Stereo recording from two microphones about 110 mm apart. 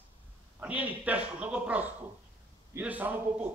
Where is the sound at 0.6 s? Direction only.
15° right (ahead or behind).